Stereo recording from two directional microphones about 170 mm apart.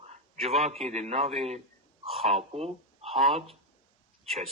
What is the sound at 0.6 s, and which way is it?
Speech, 40° right (ahead or behind).